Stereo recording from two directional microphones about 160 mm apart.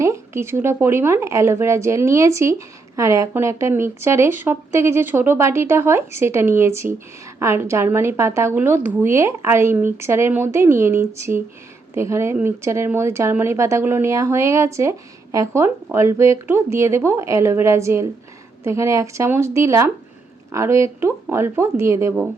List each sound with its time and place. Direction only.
0.0 s speech: 15° right (ahead or behind)